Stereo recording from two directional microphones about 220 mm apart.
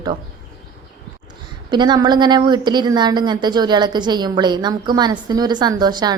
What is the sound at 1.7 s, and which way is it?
A woman's voice, 20° right (ahead or behind).